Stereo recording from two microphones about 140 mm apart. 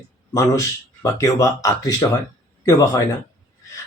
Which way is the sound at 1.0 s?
25° left (ahead or behind).